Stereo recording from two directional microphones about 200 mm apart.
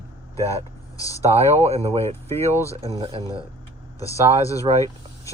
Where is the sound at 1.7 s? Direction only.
30° right (ahead or behind).